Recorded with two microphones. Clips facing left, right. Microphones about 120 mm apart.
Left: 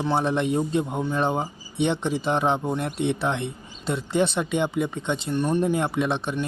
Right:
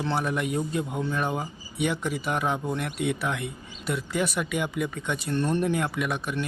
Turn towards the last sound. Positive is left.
turn(degrees=25)  # may be behind; listen again after turning